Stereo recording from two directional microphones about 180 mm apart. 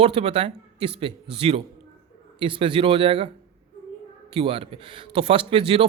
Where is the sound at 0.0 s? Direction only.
30° right (ahead or behind).